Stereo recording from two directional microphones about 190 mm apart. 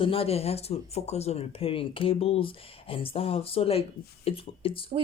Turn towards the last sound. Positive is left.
turn(degrees=30)  # may be behind; listen again after turning